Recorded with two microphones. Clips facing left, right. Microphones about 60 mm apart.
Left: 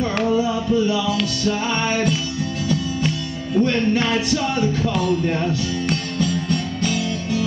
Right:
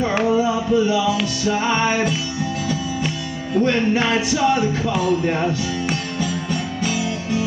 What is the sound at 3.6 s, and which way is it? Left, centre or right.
Speech, centre.